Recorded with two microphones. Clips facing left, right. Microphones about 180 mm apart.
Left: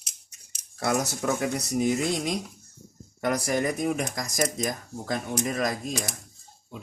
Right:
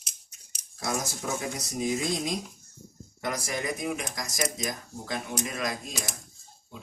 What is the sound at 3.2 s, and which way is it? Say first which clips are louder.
Speech: left 6 dB; 55° left (ahead or behind).